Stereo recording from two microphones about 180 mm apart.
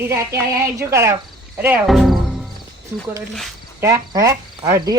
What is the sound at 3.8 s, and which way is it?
Speech, 15° right (ahead or behind).